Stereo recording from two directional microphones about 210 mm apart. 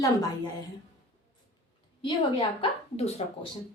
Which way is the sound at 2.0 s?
25° left (ahead or behind).